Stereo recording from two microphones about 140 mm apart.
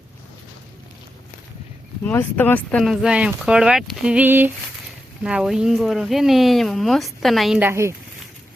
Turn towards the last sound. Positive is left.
turn(degrees=-20)  # may be behind; listen again after turning